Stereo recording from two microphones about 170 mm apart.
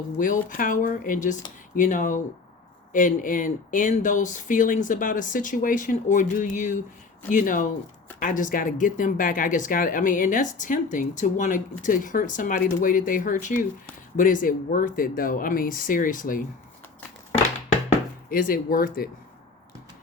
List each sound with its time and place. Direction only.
0.2 s speech: 50° left (ahead or behind)
18.3 s speech: 55° left (ahead or behind)